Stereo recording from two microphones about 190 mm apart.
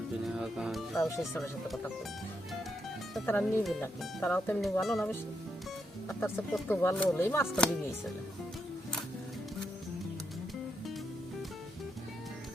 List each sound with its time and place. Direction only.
0.3 s speech: centre (ahead or behind)
0.9 s speech: 15° left (ahead or behind)
1.4 s speech: centre (ahead or behind)
3.2 s speech: 10° left (ahead or behind)
6.1 s speech: 10° left (ahead or behind)